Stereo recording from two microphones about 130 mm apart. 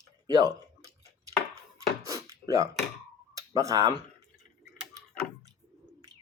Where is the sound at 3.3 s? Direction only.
25° right (ahead or behind).